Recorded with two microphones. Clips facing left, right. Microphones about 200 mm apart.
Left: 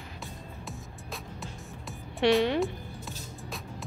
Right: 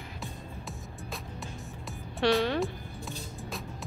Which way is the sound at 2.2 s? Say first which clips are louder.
Left 2 dB; 20° left (ahead or behind).